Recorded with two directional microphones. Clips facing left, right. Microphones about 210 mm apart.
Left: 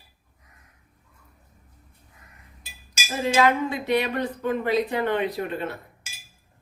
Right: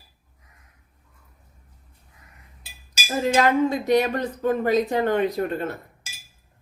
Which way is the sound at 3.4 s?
45° right (ahead or behind).